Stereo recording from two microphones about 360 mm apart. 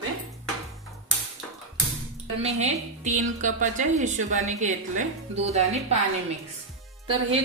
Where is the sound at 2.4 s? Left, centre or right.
Centre.